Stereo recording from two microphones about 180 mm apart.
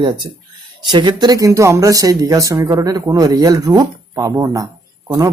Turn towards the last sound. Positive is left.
turn(degrees=-20)  # may be behind; listen again after turning